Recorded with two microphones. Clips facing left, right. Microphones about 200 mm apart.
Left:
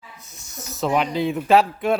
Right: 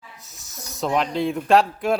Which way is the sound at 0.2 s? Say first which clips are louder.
Left 2 dB; centre (ahead or behind).